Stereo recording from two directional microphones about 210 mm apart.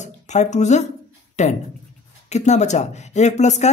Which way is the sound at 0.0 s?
35° left (ahead or behind).